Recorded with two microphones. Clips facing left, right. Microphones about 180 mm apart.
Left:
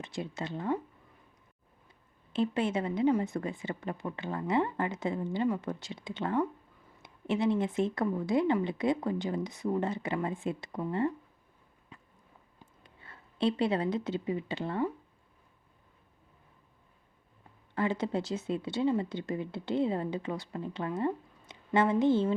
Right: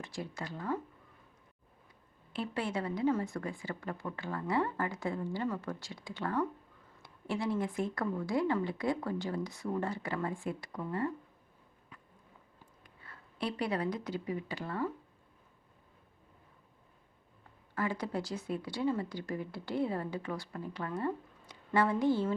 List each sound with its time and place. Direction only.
0.0 s a woman's voice: 20° left (ahead or behind)
2.3 s a woman's voice: 20° left (ahead or behind)
11.9 s a sound: 25° left (ahead or behind)
12.8 s speech: 25° left (ahead or behind)
17.7 s a woman's voice: 25° left (ahead or behind)